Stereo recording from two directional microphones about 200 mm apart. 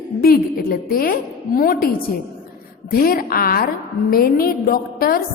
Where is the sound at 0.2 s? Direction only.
50° left (ahead or behind).